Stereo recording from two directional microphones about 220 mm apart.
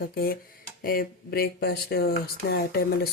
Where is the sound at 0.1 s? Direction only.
45° left (ahead or behind).